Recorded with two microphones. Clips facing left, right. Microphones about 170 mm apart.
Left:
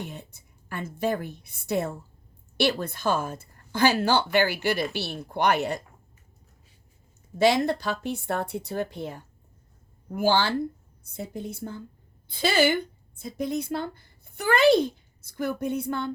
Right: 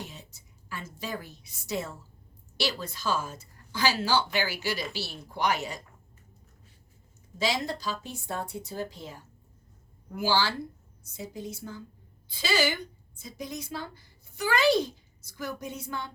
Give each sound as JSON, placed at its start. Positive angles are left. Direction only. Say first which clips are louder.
{"t": 0.0, "sound": "a woman's voice", "louder": "left 5 dB", "side_deg": 55}
{"t": 7.3, "sound": "a woman's voice", "louder": "left 9 dB", "side_deg": 60}